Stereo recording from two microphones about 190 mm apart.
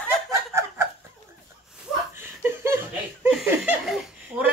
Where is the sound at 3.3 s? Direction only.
5° right (ahead or behind).